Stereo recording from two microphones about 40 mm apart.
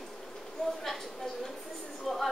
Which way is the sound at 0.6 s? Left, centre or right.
Centre.